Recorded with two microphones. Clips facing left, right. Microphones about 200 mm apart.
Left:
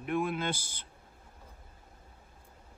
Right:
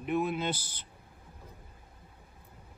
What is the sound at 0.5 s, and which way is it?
Speech, 50° left (ahead or behind).